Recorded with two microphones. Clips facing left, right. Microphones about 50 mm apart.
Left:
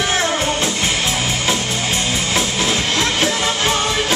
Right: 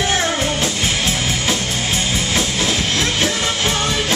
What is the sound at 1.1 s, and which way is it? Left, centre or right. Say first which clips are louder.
Music: left 1 dB; left.